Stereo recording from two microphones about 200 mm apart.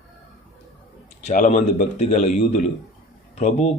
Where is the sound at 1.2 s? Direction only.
40° left (ahead or behind).